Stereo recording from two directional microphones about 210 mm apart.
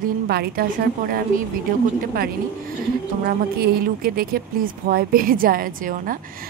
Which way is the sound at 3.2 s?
45° right (ahead or behind).